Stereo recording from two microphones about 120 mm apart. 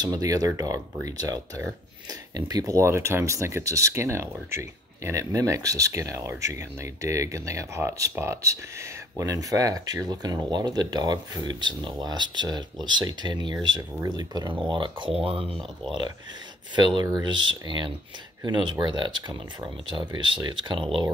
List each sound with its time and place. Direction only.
0.0 s speech: 30° right (ahead or behind); by 15.5 s 50° right (ahead or behind)
16.7 s speech: 40° right (ahead or behind)